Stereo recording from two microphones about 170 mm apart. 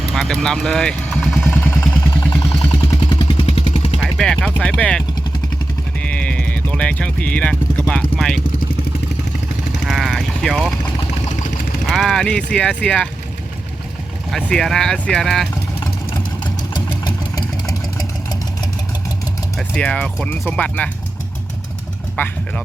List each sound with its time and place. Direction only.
0.1 s vehicle: centre (ahead or behind)
1.5 s vehicle: 15° left (ahead or behind)
3.3 s vehicle: 35° left (ahead or behind)
4.2 s speech: 5° left (ahead or behind)
6.0 s vehicle: 5° left (ahead or behind)
8.1 s speech: centre (ahead or behind)
9.8 s vehicle: centre (ahead or behind)
11.9 s speech: centre (ahead or behind)
14.3 s speech: 5° left (ahead or behind)
16.4 s engine: 25° left (ahead or behind)
17.1 s vehicle: 20° left (ahead or behind)
19.5 s speech: 5° left (ahead or behind)
22.1 s speech: 5° left (ahead or behind)